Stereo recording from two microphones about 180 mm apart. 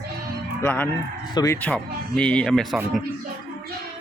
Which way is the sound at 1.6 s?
5° left (ahead or behind).